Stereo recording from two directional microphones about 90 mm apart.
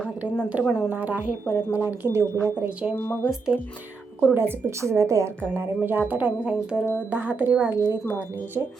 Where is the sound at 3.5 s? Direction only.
5° right (ahead or behind).